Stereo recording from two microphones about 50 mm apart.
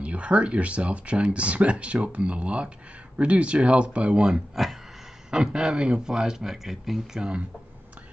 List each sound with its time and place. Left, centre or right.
0.0 s speech: right; by 7.0 s centre
7.2 s speech: centre